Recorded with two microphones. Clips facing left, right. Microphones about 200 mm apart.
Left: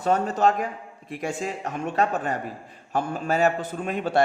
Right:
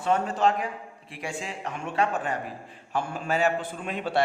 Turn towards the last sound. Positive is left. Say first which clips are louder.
# left 4 dB
turn(degrees=45)  # may be behind; listen again after turning